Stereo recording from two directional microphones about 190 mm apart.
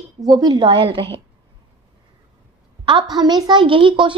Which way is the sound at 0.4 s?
25° right (ahead or behind).